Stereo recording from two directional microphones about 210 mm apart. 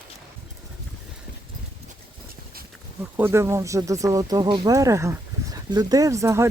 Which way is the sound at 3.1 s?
10° right (ahead or behind).